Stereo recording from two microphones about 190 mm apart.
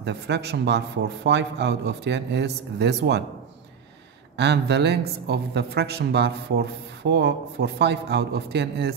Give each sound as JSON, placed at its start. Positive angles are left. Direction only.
{"t": 0.0, "sound": "speech", "side_deg": -60}
{"t": 4.4, "sound": "speech", "side_deg": -65}